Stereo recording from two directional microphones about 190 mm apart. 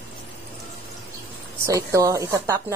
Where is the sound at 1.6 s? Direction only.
15° right (ahead or behind).